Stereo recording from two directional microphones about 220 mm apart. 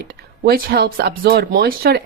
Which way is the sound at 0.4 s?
45° right (ahead or behind).